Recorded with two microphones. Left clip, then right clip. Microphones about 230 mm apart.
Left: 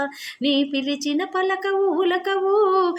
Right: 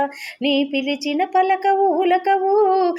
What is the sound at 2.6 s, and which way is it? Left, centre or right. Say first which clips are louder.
Humming: right 2 dB; left.